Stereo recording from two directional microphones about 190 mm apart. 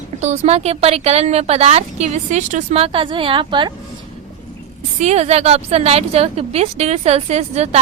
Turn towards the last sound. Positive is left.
turn(degrees=-35)  # may be behind; listen again after turning